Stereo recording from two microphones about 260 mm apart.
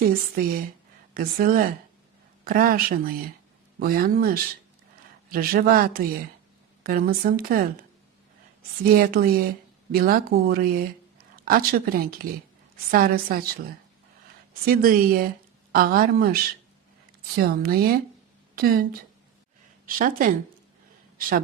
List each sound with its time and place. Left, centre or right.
0.4 s speech: right
8.9 s speech: right
14.6 s a woman's voice: right